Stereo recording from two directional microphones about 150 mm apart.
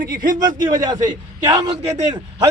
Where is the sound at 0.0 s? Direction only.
75° right (ahead or behind).